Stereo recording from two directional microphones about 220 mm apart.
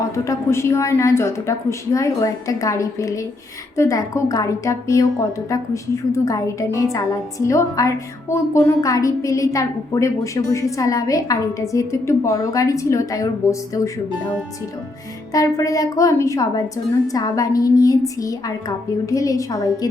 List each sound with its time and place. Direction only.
0.3 s a woman's voice: 10° left (ahead or behind)
15.3 s a woman's voice: 15° left (ahead or behind)